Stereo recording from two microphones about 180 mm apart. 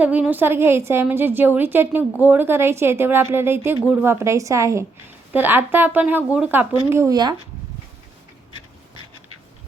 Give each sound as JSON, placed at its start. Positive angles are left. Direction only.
{"t": 0.0, "sound": "a woman's voice", "side_deg": -10}
{"t": 6.9, "sound": "speech", "side_deg": -20}